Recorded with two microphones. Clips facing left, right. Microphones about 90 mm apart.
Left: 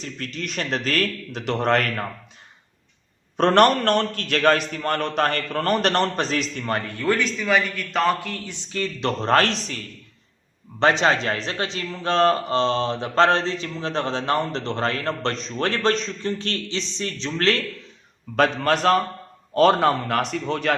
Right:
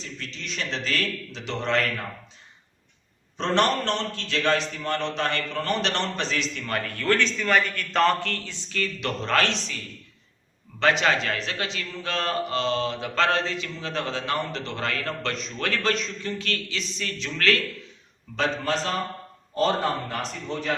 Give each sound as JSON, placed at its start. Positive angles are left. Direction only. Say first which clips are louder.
{"t": 0.0, "sound": "a man's voice", "louder": "left 6 dB", "side_deg": 50}
{"t": 3.3, "sound": "a man's voice", "louder": "left 7 dB", "side_deg": 55}
{"t": 6.7, "sound": "a man's voice", "louder": "left 2 dB", "side_deg": 25}
{"t": 10.8, "sound": "a man's voice", "louder": "left 3 dB", "side_deg": 30}
{"t": 18.3, "sound": "a man's voice", "louder": "left 6 dB", "side_deg": 60}
{"t": 19.5, "sound": "a man's voice", "louder": "left 7 dB", "side_deg": 75}